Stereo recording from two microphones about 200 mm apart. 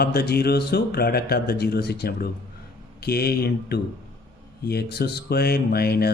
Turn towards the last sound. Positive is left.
turn(degrees=50)  # may be behind; listen again after turning